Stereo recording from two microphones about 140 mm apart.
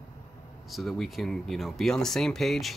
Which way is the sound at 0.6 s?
Centre (ahead or behind).